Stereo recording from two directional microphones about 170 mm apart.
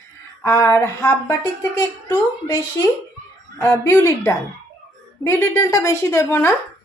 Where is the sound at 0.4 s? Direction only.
15° left (ahead or behind).